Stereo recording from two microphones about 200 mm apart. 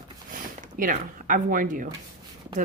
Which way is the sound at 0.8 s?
45° right (ahead or behind).